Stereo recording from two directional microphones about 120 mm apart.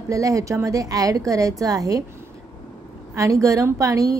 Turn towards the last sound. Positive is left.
turn(degrees=-30)  # may be behind; listen again after turning